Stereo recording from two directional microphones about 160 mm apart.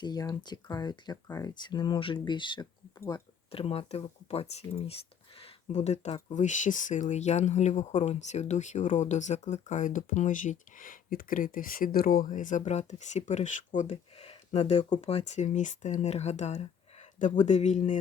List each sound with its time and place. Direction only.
0.0 s speech: 25° left (ahead or behind); by 17.9 s 50° left (ahead or behind)